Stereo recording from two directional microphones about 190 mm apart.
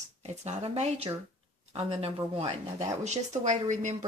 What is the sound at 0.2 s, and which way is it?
Speech, 35° right (ahead or behind).